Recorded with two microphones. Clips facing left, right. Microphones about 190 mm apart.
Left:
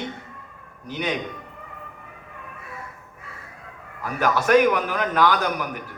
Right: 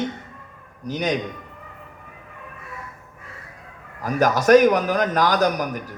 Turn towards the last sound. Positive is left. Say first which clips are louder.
# right 5 dB
turn(degrees=-40)  # may be behind; listen again after turning